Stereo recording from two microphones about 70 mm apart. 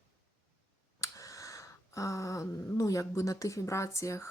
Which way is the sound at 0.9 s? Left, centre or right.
Left.